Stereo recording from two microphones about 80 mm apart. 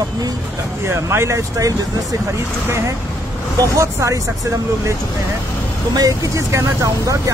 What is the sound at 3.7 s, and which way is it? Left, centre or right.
Speech, right.